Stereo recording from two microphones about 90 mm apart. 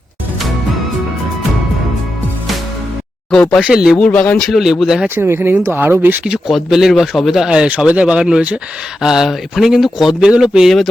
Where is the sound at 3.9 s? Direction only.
15° left (ahead or behind).